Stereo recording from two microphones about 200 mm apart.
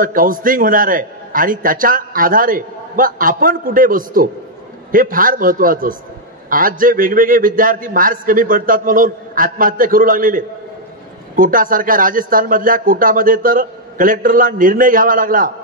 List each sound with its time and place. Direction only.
0.0 s a man's voice: 45° right (ahead or behind)